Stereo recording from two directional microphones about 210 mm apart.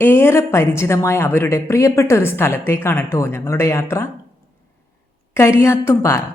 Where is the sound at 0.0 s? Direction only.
10° left (ahead or behind).